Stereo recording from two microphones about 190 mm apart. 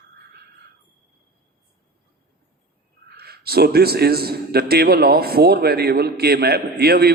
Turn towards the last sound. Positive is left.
turn(degrees=-55)  # may be behind; listen again after turning